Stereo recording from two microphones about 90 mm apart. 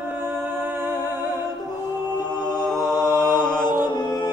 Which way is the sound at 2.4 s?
5° left (ahead or behind).